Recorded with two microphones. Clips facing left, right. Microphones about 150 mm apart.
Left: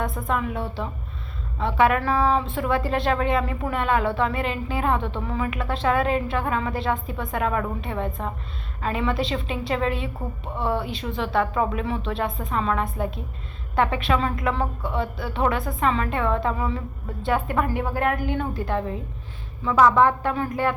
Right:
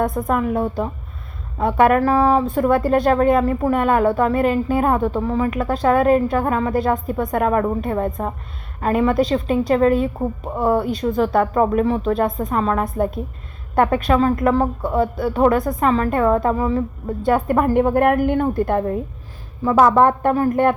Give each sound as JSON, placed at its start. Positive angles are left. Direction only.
{"t": 0.0, "sound": "a woman's voice", "side_deg": -45}